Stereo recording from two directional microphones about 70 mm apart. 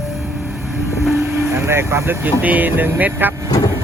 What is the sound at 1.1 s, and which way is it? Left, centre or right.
Vehicle, right.